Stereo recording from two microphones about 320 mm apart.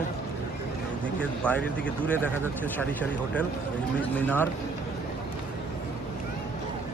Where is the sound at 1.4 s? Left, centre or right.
Centre.